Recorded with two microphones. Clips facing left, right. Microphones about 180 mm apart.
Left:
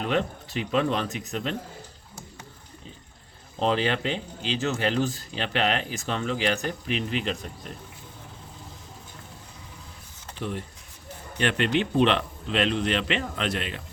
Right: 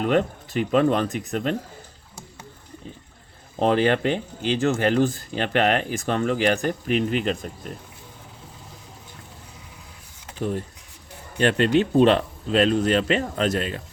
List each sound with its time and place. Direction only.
0.0 s speech: 50° right (ahead or behind)
3.6 s speech: 50° right (ahead or behind)
10.3 s speech: 45° right (ahead or behind)